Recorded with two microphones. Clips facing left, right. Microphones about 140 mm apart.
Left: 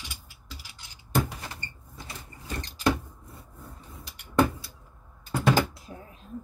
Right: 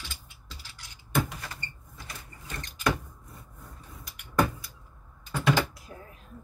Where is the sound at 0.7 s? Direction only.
25° left (ahead or behind).